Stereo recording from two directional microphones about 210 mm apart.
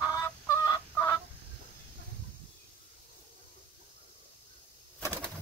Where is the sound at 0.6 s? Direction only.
15° left (ahead or behind).